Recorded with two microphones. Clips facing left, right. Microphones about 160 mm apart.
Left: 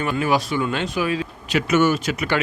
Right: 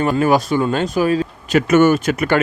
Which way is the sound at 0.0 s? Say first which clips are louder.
Right 6 dB; 40° right (ahead or behind).